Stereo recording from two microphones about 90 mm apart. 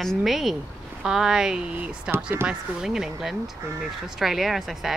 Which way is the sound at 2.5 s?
5° right (ahead or behind).